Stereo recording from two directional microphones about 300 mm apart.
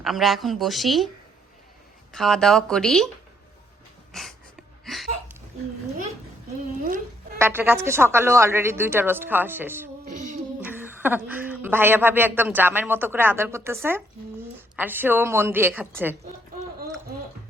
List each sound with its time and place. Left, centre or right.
0.0 s a woman's voice: centre
2.1 s a woman's voice: centre
4.1 s a sound: centre
7.3 s a woman's voice: centre
10.1 s a sound: right
10.6 s a woman's voice: centre